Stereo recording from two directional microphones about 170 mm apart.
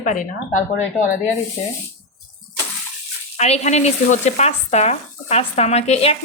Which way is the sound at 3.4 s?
40° left (ahead or behind).